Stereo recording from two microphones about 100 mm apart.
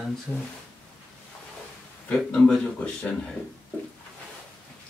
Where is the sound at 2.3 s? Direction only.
10° left (ahead or behind).